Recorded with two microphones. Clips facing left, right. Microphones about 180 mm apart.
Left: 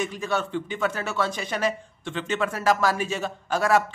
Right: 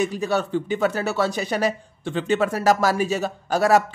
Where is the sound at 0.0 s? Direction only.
35° right (ahead or behind).